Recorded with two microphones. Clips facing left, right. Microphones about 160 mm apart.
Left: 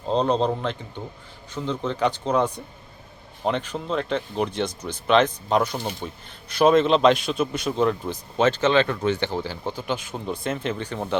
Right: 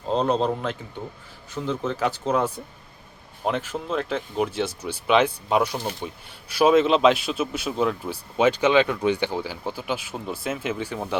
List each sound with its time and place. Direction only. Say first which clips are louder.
0.1 s speech: left 1 dB; 5° right (ahead or behind)